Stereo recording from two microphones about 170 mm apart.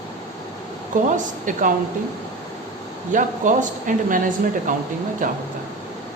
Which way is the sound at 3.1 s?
50° right (ahead or behind).